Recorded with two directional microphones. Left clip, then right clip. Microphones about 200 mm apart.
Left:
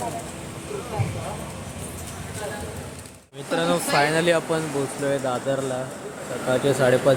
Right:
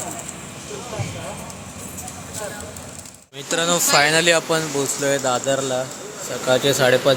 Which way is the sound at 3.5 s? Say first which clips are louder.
Right 4 dB; 15° right (ahead or behind).